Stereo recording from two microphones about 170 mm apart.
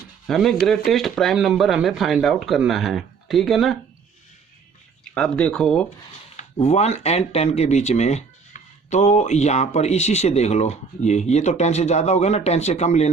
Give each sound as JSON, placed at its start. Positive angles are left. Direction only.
{"t": 0.3, "sound": "speech", "side_deg": 0}
{"t": 5.1, "sound": "speech", "side_deg": 5}
{"t": 6.3, "sound": "speech", "side_deg": 40}